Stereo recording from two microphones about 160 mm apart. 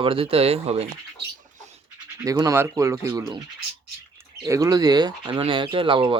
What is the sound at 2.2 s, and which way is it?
Speech, 20° right (ahead or behind).